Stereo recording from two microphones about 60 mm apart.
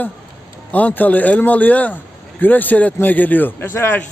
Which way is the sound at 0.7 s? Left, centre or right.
Left.